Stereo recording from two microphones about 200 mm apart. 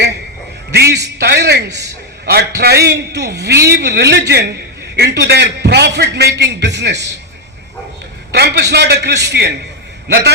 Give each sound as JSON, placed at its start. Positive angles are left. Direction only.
{"t": 0.7, "sound": "a man's voice", "side_deg": -55}
{"t": 8.3, "sound": "a man's voice", "side_deg": -55}